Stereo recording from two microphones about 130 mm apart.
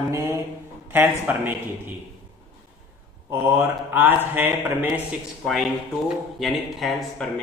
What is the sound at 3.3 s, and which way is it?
Speech, 20° right (ahead or behind).